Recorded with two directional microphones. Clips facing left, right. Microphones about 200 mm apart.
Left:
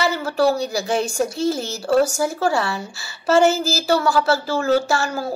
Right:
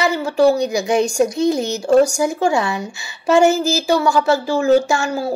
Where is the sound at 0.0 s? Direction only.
15° right (ahead or behind).